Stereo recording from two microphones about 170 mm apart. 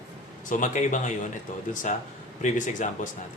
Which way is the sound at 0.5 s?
50° left (ahead or behind).